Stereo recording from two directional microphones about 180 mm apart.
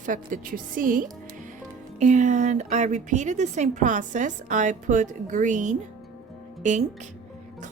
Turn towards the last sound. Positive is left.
turn(degrees=-40)  # may be behind; listen again after turning